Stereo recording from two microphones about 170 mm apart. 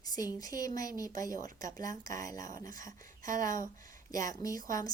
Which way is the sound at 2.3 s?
50° right (ahead or behind).